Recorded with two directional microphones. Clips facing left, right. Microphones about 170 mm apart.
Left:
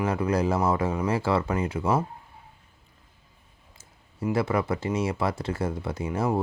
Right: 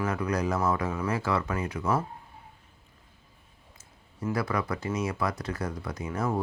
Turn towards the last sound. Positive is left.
turn(degrees=30)  # may be behind; listen again after turning